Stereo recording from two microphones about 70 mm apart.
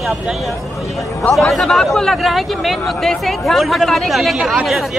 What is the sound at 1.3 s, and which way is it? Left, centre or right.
Speech, centre.